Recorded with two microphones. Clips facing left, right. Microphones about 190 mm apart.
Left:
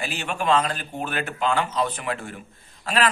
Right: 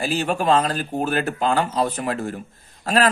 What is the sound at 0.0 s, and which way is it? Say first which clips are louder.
Speech: right 6 dB; 35° right (ahead or behind).